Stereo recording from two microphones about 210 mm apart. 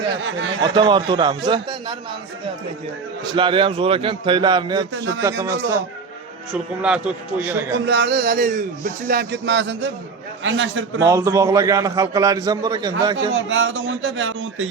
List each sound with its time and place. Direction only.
0.2 s speech: 60° right (ahead or behind)
0.6 s a man's voice: 20° right (ahead or behind)
3.3 s a man's voice: 25° right (ahead or behind)
4.9 s speech: 60° right (ahead or behind)
5.4 s a man's voice: 15° right (ahead or behind)
7.9 s speech: 55° right (ahead or behind)
11.0 s a man's voice: 15° right (ahead or behind)
13.5 s speech: 65° right (ahead or behind)